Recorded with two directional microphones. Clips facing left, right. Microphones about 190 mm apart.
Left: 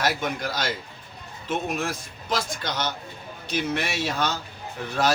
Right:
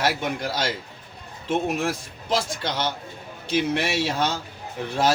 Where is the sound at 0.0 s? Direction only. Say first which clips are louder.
Right 1 dB; 25° right (ahead or behind).